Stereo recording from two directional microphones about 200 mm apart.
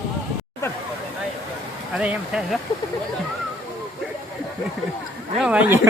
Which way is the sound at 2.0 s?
5° right (ahead or behind).